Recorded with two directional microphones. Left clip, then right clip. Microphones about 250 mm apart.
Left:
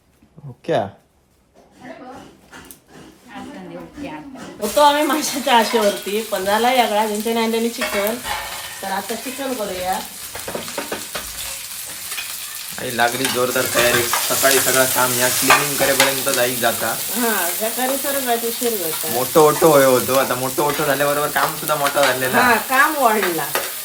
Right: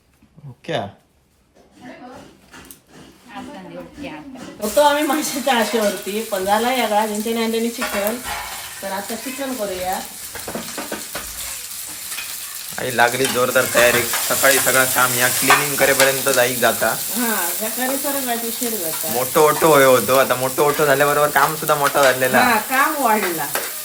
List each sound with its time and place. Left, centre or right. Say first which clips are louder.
4.6 s speech: left 1 dB; centre
10.4 s frying: left 2 dB; centre
12.7 s speech: right 2 dB; centre
19.2 s speech: left 2 dB; centre
19.6 s speech: even; centre